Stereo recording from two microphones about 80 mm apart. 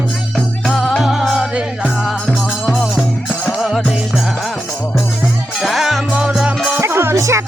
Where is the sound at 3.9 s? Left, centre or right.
Centre.